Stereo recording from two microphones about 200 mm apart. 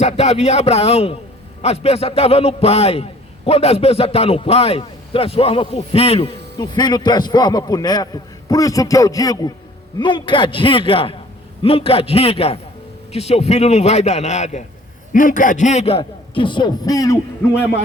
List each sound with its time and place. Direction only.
0.0 s a man's voice: 35° left (ahead or behind); by 17.2 s 20° left (ahead or behind)